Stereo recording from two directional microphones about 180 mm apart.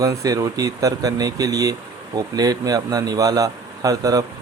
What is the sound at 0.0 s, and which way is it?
Speech, 20° right (ahead or behind).